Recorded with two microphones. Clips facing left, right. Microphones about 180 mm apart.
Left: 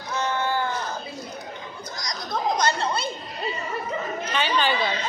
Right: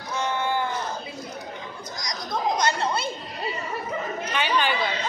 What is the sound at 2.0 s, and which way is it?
Chatter, 20° right (ahead or behind).